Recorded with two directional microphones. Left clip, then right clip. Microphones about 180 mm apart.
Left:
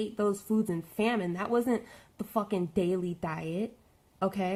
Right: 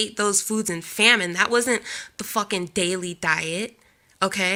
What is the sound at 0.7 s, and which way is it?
Speech, 15° right (ahead or behind).